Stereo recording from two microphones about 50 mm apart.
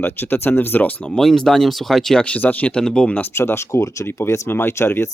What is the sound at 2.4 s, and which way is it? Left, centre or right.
Speech, left.